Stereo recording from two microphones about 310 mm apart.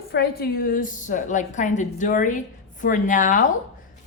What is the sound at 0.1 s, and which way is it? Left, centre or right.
A woman's voice, left.